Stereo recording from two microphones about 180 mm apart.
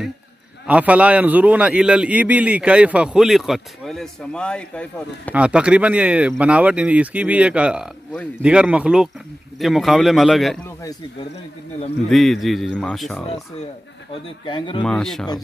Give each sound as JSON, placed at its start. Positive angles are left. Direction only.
{"t": 0.7, "sound": "a man's voice", "side_deg": -5}
{"t": 5.3, "sound": "a man's voice", "side_deg": -5}
{"t": 12.1, "sound": "speech", "side_deg": 0}
{"t": 14.4, "sound": "speech", "side_deg": 25}
{"t": 14.8, "sound": "speech", "side_deg": 5}